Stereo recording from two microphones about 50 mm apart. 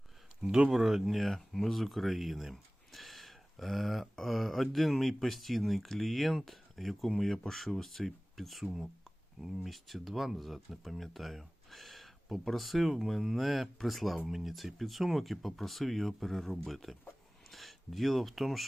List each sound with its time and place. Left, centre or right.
0.4 s speech: centre
1.0 s speech: centre